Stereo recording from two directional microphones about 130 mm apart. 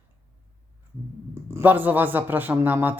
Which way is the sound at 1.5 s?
20° right (ahead or behind).